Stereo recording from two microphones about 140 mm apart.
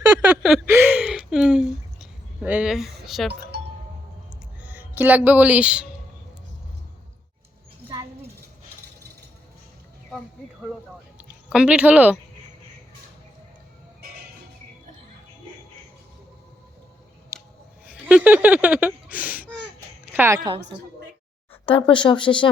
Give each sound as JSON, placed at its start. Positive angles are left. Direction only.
{"t": 0.4, "sound": "a sound", "side_deg": -15}
{"t": 4.6, "sound": "speech", "side_deg": -10}
{"t": 11.5, "sound": "speech", "side_deg": -10}
{"t": 17.3, "sound": "scissors", "side_deg": -20}
{"t": 17.8, "sound": "a sound", "side_deg": -10}
{"t": 20.1, "sound": "speech", "side_deg": -15}
{"t": 21.7, "sound": "speech", "side_deg": 40}